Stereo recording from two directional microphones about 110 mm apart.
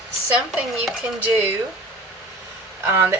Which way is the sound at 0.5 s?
10° right (ahead or behind).